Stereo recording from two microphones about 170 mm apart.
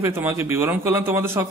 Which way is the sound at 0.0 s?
15° right (ahead or behind).